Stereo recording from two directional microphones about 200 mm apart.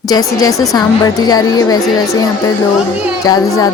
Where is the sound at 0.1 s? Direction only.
20° left (ahead or behind).